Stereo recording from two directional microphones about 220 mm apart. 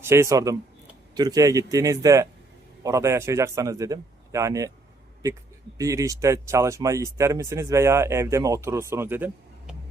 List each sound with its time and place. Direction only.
0.0 s speech: 10° right (ahead or behind)